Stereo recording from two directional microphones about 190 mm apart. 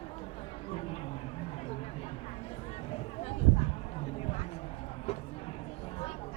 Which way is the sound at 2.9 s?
35° left (ahead or behind).